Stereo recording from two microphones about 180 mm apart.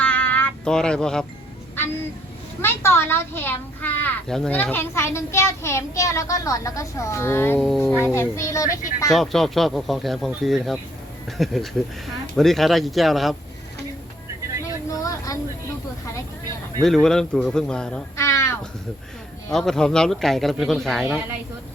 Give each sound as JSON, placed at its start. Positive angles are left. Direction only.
{"t": 0.0, "sound": "a sound", "side_deg": 10}
{"t": 2.6, "sound": "a child's voice", "side_deg": 15}
{"t": 9.1, "sound": "speech", "side_deg": 0}
{"t": 14.6, "sound": "a sound", "side_deg": 20}
{"t": 16.8, "sound": "speech", "side_deg": 0}
{"t": 18.2, "sound": "crow", "side_deg": 15}
{"t": 19.5, "sound": "speech", "side_deg": 0}